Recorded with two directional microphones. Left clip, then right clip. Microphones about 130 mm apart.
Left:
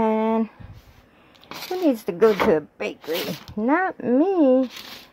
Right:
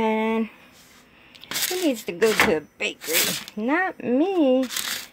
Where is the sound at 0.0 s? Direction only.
30° left (ahead or behind).